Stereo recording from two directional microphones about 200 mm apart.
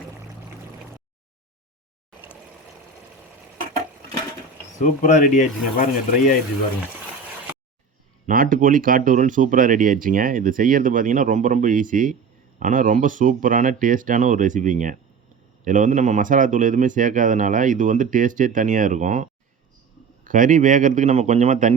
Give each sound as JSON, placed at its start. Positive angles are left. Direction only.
{"t": 4.8, "sound": "speech", "side_deg": 35}
{"t": 8.3, "sound": "speech", "side_deg": -45}